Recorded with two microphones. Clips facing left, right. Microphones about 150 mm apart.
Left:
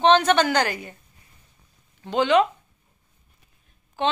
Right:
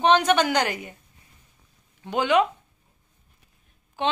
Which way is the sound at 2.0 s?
10° right (ahead or behind).